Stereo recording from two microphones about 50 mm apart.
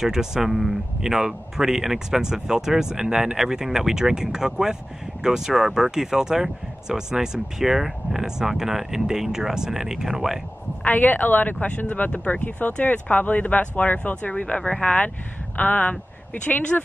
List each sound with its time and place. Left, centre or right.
0.0 s speech: centre
10.8 s speech: left
11.5 s speech: left
15.5 s speech: left